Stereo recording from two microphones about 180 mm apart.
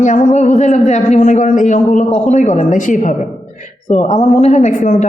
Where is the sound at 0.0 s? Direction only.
45° left (ahead or behind).